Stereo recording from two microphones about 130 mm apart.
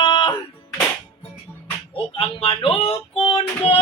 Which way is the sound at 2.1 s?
45° left (ahead or behind).